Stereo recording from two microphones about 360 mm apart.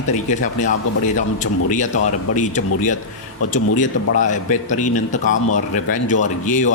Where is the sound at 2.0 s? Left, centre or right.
Left.